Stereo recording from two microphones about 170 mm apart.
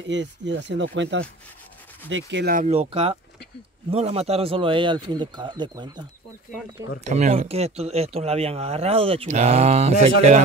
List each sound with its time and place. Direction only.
0.1 s speech: 90° right
2.5 s speech: 40° right (ahead or behind); by 6.0 s 25° right (ahead or behind)
7.1 s speech: 45° right (ahead or behind)